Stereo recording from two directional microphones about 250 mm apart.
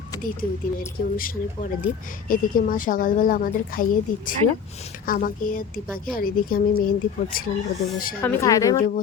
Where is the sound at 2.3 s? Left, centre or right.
Left.